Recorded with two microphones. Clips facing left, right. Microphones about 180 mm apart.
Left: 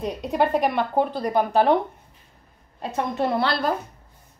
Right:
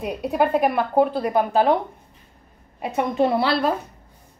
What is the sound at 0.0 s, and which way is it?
A woman's voice, 10° right (ahead or behind).